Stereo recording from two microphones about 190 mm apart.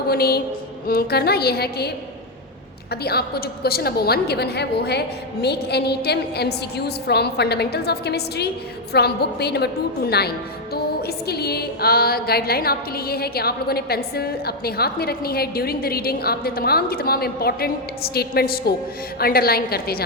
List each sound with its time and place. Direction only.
0.1 s a woman's voice: 55° left (ahead or behind)
2.9 s a woman's voice: 55° left (ahead or behind)